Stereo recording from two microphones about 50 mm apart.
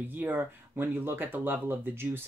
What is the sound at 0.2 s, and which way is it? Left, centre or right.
Speech, right.